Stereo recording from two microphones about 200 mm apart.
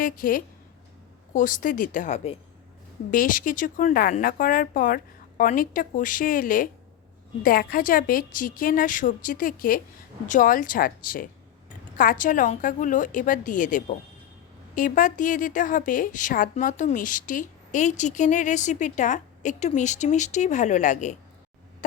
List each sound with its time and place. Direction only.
0.0 s a woman's voice: 45° left (ahead or behind)
3.1 s a woman's voice: 40° left (ahead or behind)